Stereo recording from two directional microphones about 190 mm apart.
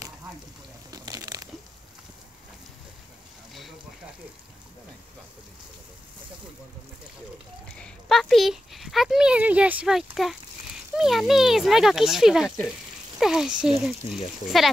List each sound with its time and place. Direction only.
0.9 s crumpling: 20° right (ahead or behind)
7.8 s speech: centre (ahead or behind)